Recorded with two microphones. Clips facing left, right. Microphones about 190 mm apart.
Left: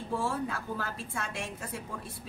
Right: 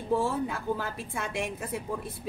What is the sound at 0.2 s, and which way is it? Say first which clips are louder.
A woman's voice: right 3 dB; 20° right (ahead or behind).